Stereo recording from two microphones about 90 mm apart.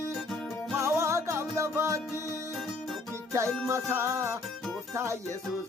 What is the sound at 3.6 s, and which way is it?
Music, 35° right (ahead or behind).